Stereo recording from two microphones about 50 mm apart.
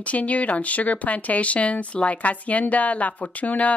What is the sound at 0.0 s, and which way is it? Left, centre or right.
Speech, left.